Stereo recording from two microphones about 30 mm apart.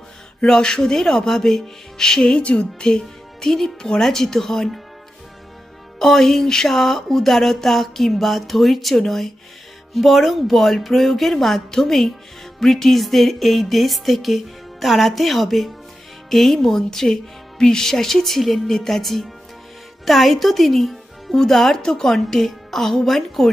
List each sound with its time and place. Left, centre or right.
0.5 s speech: left
2.4 s speech: left
2.8 s speech: left
3.4 s music: centre
5.9 s music: centre
9.9 s music: centre
16.3 s speech: centre
16.6 s music: centre
21.3 s music: centre